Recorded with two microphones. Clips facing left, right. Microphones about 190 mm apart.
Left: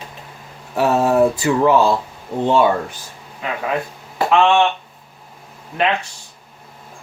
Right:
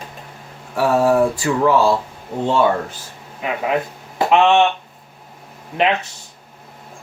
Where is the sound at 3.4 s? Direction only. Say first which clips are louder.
Right 2 dB; 20° right (ahead or behind).